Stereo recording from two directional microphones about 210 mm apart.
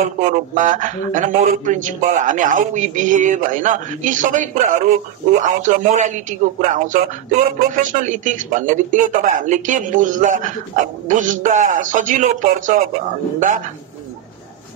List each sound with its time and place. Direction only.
0.2 s speech: 40° right (ahead or behind)